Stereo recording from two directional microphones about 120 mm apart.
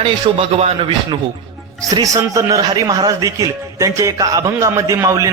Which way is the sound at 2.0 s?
30° right (ahead or behind).